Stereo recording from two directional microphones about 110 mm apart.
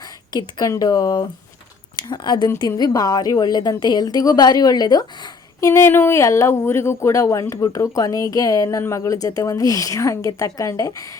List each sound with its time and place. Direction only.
0.3 s a woman's voice: 40° left (ahead or behind)